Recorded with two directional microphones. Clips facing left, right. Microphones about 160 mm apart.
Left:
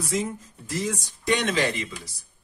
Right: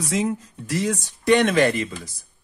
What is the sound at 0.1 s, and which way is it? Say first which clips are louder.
Speech: right 5 dB; 80° right.